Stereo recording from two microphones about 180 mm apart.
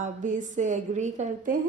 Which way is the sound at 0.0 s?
45° right (ahead or behind).